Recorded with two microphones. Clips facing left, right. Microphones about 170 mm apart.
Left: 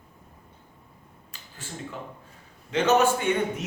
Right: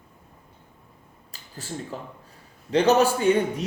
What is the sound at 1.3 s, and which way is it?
A man's voice, 40° right (ahead or behind).